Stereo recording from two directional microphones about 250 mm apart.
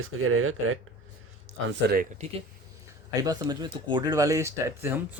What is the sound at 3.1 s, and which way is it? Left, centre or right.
Speech, centre.